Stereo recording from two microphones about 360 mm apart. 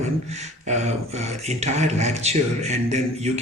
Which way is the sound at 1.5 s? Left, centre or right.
Centre.